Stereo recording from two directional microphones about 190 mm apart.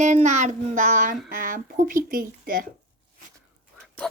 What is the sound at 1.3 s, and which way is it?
Speech, 45° right (ahead or behind).